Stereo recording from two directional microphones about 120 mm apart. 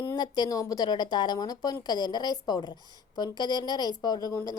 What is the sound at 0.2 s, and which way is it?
Speech, 35° left (ahead or behind).